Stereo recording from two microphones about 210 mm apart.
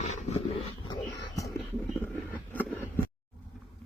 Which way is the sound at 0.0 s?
30° left (ahead or behind).